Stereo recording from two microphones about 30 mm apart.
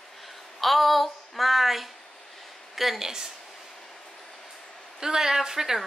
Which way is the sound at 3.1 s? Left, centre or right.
Centre.